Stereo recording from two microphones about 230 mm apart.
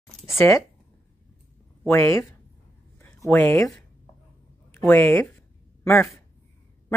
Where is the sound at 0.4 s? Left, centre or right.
Centre.